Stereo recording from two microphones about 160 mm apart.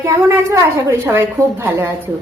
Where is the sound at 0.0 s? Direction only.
15° right (ahead or behind).